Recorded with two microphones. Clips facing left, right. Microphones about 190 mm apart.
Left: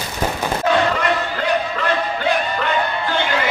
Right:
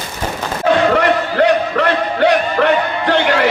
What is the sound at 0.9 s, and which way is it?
Music, 65° right (ahead or behind).